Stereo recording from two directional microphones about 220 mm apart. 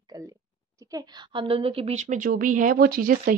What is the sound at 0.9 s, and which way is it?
A woman's voice, 20° right (ahead or behind).